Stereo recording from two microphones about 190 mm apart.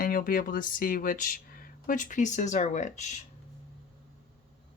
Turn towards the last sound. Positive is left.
turn(degrees=40)  # may be behind; listen again after turning